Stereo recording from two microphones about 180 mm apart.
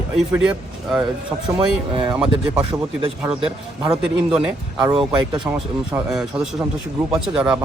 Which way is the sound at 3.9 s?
5° right (ahead or behind).